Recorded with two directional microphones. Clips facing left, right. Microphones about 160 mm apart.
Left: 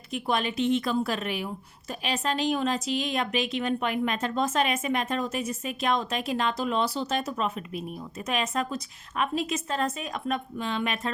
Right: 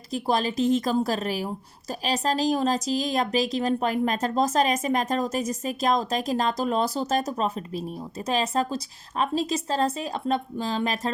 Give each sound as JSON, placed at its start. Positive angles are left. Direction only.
{"t": 0.1, "sound": "a woman's voice", "side_deg": -35}